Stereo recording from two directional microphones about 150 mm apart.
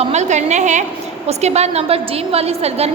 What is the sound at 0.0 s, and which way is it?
A woman's voice, 50° right (ahead or behind).